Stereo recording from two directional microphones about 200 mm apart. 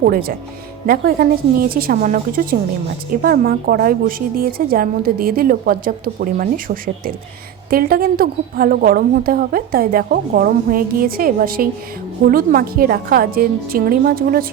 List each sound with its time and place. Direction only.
0.0 s speech: 50° right (ahead or behind)